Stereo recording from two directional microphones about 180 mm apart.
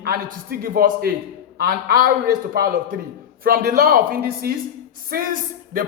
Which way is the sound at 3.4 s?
55° right (ahead or behind).